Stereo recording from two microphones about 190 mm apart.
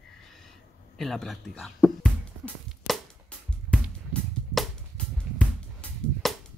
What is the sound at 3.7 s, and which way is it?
Music, 5° left (ahead or behind).